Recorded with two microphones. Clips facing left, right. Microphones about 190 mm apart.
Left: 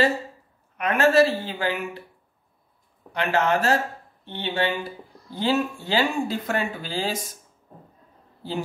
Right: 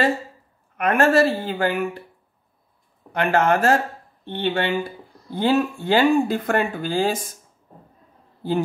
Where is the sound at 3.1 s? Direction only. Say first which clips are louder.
Right 3 dB; 50° right (ahead or behind).